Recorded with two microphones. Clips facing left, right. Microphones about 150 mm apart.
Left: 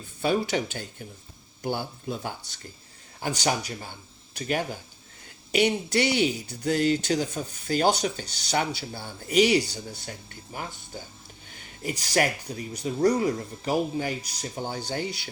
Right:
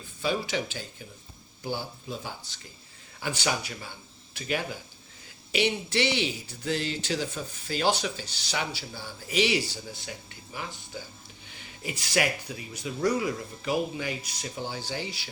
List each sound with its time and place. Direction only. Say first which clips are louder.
0.2 s speech: left 4 dB; 50° left (ahead or behind)
3.2 s speech: left 3 dB; 45° left (ahead or behind)